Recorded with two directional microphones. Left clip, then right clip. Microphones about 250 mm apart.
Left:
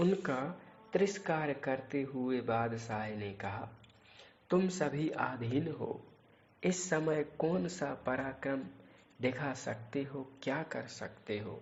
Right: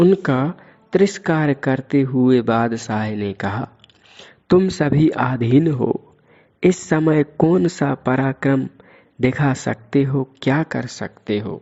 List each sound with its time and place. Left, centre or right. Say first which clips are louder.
0.0 s speech: right 17 dB; right